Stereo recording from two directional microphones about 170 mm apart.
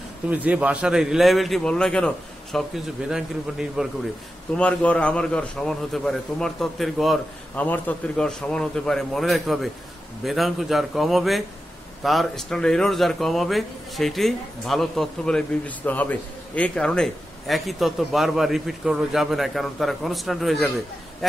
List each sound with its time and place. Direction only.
0.3 s a man's voice: 10° right (ahead or behind)
4.6 s a man's voice: 5° left (ahead or behind)